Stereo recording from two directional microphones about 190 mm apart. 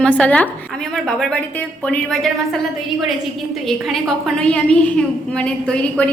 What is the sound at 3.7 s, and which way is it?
A woman's voice, centre (ahead or behind).